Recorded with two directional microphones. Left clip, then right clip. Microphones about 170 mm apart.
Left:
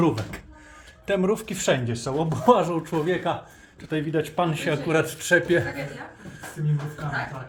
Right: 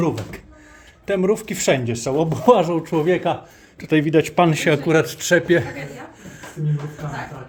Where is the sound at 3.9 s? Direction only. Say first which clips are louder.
Right 9 dB; 60° right (ahead or behind).